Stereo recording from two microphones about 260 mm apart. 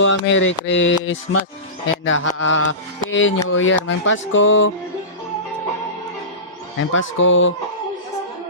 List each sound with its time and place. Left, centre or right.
0.0 s speech: left
6.7 s speech: left